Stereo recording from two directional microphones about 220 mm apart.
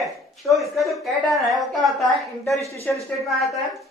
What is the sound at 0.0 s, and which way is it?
A woman's voice, centre (ahead or behind).